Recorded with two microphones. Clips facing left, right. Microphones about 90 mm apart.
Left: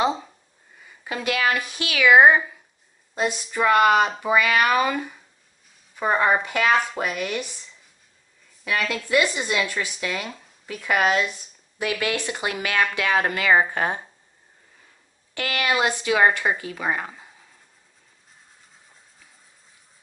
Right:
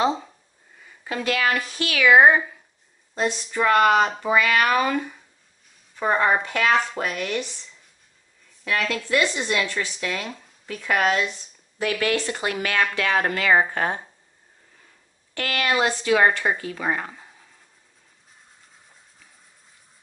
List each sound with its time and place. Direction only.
0.0 s a sound: 10° left (ahead or behind)
1.0 s speech: 15° left (ahead or behind)
8.6 s speech: 10° left (ahead or behind)
15.3 s speech: 15° left (ahead or behind)